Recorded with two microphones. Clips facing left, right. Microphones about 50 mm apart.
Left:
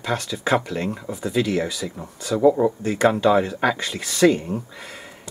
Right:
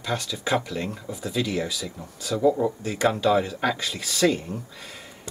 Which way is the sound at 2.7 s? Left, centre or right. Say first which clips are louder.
Left 5 dB; centre.